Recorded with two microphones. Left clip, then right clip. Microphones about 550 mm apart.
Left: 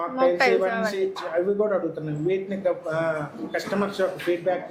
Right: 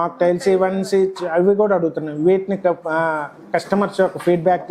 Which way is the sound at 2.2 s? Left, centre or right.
Right.